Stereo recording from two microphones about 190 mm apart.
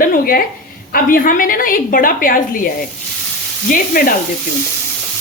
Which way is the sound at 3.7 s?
50° left (ahead or behind).